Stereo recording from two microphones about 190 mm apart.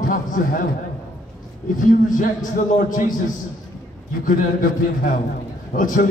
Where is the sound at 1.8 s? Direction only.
45° left (ahead or behind).